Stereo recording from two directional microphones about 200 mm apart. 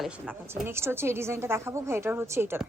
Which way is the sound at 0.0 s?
5° right (ahead or behind).